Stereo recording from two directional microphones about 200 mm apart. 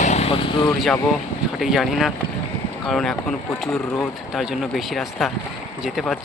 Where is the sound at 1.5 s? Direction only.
Centre (ahead or behind).